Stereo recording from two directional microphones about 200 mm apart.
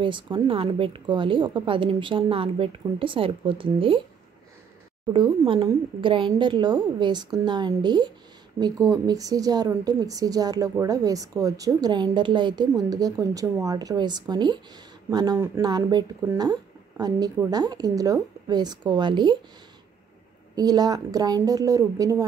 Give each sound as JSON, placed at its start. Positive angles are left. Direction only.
{"t": 0.0, "sound": "speech", "side_deg": -25}
{"t": 5.1, "sound": "speech", "side_deg": -25}
{"t": 20.5, "sound": "a woman's voice", "side_deg": -20}